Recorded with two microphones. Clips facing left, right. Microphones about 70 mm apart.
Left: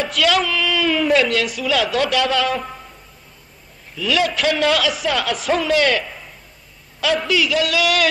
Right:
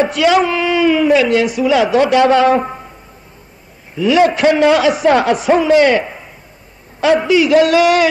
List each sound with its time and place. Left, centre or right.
0.0 s a man's voice: right
0.8 s speech: centre
1.3 s a man's voice: right
3.9 s a man's voice: right
5.4 s a man's voice: centre
7.4 s a sound: right